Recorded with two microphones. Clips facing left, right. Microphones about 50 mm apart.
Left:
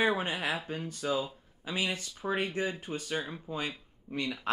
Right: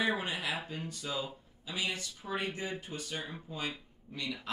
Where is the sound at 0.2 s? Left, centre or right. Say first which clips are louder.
Left 3 dB; left.